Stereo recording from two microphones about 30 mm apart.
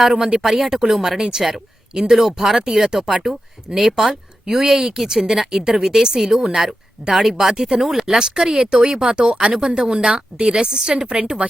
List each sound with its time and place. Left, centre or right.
0.0 s a woman's voice: centre; by 11.4 s right